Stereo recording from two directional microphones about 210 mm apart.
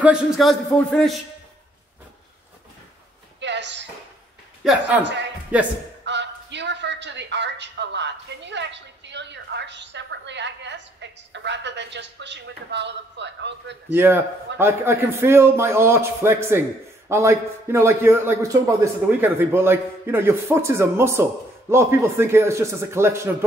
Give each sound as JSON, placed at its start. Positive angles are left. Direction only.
{"t": 0.0, "sound": "a man's voice", "side_deg": 0}
{"t": 3.3, "sound": "a sound", "side_deg": -55}
{"t": 4.6, "sound": "a man's voice", "side_deg": -5}
{"t": 6.0, "sound": "a woman's voice", "side_deg": -55}
{"t": 13.9, "sound": "a man's voice", "side_deg": -10}